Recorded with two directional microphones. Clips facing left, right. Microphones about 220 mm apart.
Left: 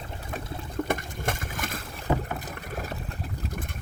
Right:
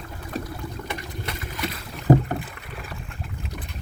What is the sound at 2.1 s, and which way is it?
Rowboat, 40° right (ahead or behind).